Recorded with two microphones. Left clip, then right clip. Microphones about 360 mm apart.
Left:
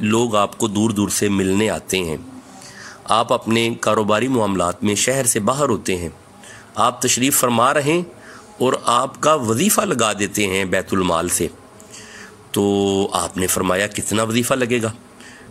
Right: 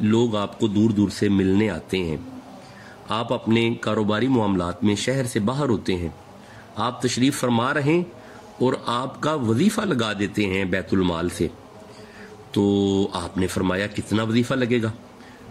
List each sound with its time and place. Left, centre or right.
0.0 s a man's voice: centre
12.9 s a man's voice: centre